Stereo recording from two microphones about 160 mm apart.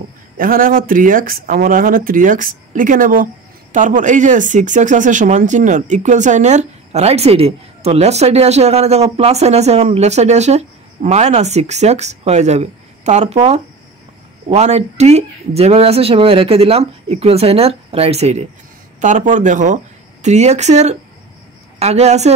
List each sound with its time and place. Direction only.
0.4 s speech: 60° right (ahead or behind); by 13.4 s 45° right (ahead or behind)
14.5 s speech: 40° right (ahead or behind)